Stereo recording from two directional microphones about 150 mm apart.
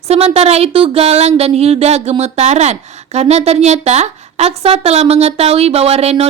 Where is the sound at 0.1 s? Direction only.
45° right (ahead or behind).